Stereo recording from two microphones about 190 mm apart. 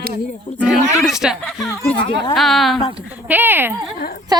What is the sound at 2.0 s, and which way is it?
Speech, 25° left (ahead or behind).